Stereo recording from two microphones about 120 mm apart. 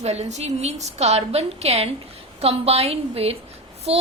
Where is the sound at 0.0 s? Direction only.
65° right (ahead or behind).